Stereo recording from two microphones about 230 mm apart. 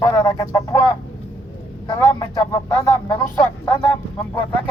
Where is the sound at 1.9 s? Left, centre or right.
Centre.